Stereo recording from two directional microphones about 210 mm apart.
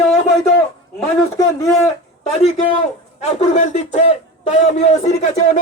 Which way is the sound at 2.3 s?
30° left (ahead or behind).